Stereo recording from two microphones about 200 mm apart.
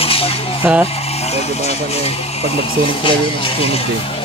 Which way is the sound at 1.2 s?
30° left (ahead or behind).